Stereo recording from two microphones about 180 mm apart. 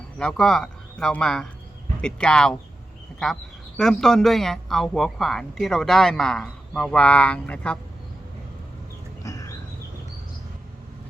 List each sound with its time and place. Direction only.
0.2 s speech: 5° left (ahead or behind)
3.8 s speech: 5° left (ahead or behind)
9.2 s bird: 20° left (ahead or behind)